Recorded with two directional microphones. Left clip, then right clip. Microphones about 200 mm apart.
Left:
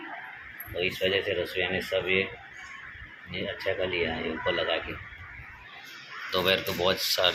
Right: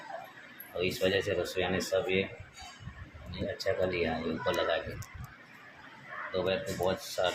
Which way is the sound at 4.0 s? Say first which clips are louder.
Left 3 dB; 10° right (ahead or behind).